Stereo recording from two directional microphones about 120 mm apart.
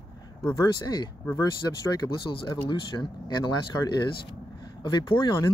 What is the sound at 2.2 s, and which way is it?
Speech, 40° left (ahead or behind).